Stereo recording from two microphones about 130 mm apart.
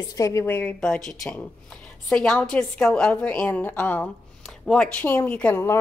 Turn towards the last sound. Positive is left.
turn(degrees=15)  # may be behind; listen again after turning